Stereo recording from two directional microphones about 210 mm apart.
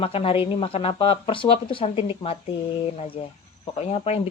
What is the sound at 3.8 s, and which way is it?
Speech, 30° left (ahead or behind).